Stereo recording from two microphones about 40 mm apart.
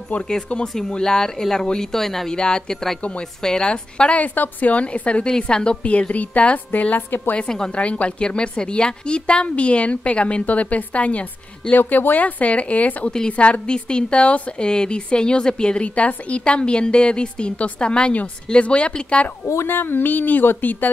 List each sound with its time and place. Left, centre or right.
0.7 s speech: centre
2.3 s a woman's voice: centre
4.1 s speech: left
5.2 s a woman's voice: left
5.8 s speech: left
7.0 s speech: left
7.3 s a woman's voice: centre
7.7 s a woman's voice: left
11.7 s a woman's voice: left
19.4 s speech: left